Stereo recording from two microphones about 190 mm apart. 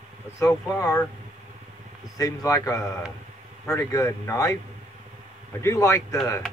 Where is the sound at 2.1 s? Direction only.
20° left (ahead or behind).